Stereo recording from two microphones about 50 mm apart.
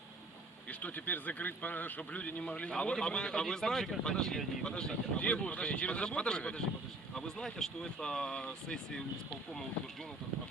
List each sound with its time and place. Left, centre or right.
0.7 s a man's voice: left; by 9.0 s centre